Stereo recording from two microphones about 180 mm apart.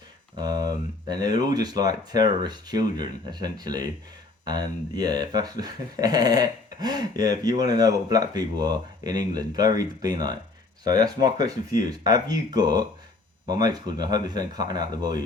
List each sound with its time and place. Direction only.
0.3 s speech: 20° right (ahead or behind)